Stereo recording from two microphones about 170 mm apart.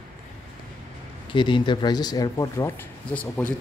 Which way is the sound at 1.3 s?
30° left (ahead or behind).